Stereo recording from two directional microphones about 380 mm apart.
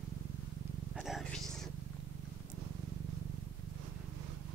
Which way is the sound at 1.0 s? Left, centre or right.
Centre.